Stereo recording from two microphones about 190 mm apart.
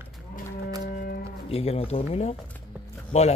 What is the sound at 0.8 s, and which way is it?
Cattle, 55° left (ahead or behind).